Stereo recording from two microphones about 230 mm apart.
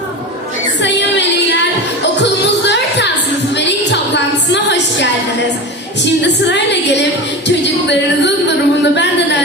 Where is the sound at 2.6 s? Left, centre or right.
Left.